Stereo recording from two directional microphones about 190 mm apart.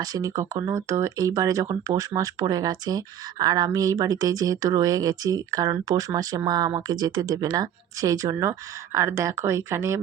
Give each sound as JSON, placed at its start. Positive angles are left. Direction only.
{"t": 0.0, "sound": "speech", "side_deg": -20}